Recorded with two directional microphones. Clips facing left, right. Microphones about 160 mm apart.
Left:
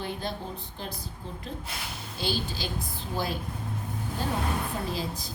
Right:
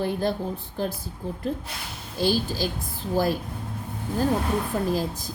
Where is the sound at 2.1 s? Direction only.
40° right (ahead or behind).